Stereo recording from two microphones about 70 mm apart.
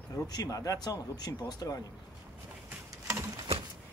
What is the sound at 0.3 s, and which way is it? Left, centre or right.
Speech, left.